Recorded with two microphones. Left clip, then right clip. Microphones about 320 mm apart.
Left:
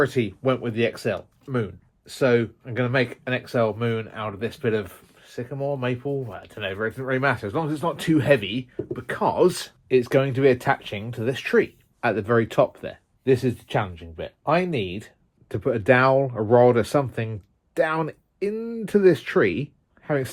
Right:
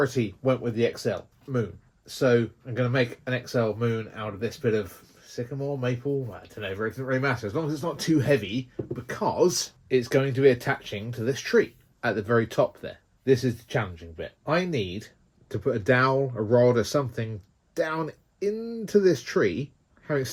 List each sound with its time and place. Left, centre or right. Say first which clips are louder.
0.0 s speech: left 3 dB; left